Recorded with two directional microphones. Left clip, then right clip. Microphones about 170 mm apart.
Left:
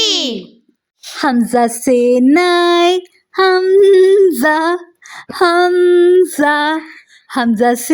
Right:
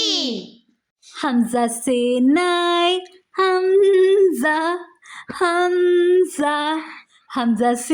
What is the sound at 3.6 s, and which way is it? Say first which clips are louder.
Speech: left 6 dB; 30° left (ahead or behind).